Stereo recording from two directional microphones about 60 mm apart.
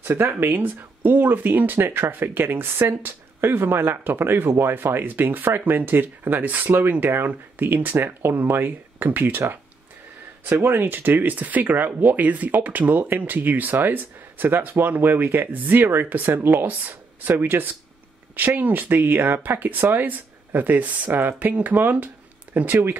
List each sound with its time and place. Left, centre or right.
0.0 s speech: right
10.4 s speech: right